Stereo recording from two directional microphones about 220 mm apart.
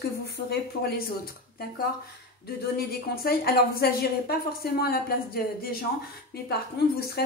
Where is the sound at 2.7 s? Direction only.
45° left (ahead or behind).